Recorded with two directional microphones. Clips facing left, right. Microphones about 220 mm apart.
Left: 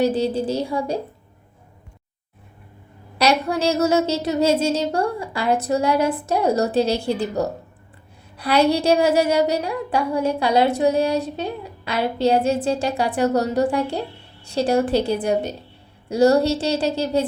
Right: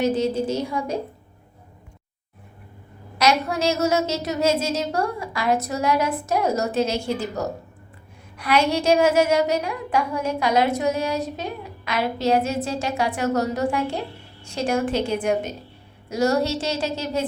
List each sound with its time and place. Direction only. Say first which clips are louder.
0.0 s a woman's voice: left 2 dB; 35° left (ahead or behind)
3.2 s a woman's voice: left 2 dB; 30° left (ahead or behind)